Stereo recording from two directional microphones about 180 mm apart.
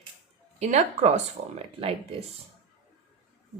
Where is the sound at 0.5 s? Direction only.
40° right (ahead or behind).